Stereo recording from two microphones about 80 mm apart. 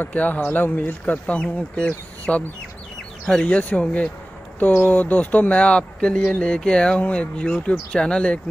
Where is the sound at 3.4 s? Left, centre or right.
Centre.